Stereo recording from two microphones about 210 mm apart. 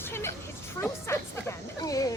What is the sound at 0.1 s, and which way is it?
Music, 10° left (ahead or behind).